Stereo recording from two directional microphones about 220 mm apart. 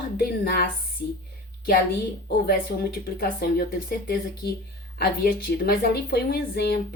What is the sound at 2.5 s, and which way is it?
Speech, 40° left (ahead or behind).